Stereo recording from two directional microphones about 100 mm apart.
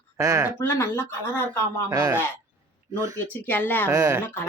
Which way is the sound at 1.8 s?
35° right (ahead or behind).